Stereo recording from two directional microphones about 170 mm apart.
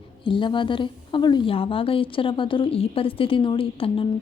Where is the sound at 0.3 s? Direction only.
30° left (ahead or behind).